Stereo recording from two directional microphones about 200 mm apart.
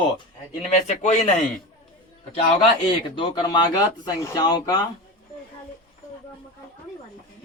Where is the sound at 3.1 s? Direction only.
25° left (ahead or behind).